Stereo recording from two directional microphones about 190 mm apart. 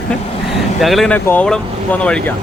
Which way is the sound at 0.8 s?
Centre (ahead or behind).